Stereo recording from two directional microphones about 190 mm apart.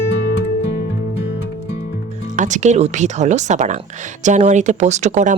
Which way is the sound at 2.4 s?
40° right (ahead or behind).